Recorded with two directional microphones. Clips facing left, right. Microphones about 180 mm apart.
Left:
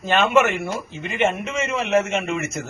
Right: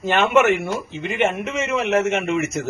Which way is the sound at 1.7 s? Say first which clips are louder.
Right 1 dB; 75° right (ahead or behind).